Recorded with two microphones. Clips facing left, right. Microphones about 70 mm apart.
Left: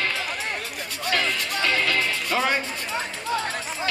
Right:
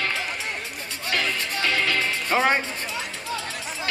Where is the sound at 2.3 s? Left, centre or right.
Right.